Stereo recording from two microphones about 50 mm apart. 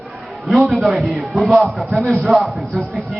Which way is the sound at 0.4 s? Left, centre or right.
Centre.